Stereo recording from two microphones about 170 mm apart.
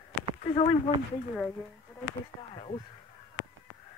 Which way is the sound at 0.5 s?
30° left (ahead or behind).